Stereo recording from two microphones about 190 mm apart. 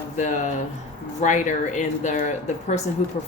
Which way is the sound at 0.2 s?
40° left (ahead or behind).